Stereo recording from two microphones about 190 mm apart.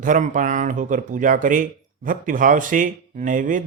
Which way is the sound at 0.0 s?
40° right (ahead or behind).